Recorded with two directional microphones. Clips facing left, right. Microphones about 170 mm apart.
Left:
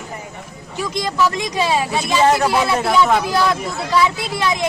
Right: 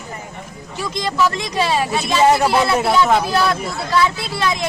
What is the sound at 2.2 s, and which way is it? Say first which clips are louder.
Speech: right 2 dB; 10° right (ahead or behind).